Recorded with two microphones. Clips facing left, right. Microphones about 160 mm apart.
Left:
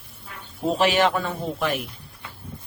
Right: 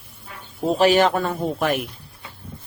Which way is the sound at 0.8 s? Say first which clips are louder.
Right 4 dB; 40° right (ahead or behind).